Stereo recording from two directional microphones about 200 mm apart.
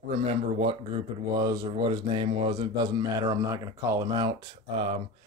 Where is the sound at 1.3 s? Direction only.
20° right (ahead or behind).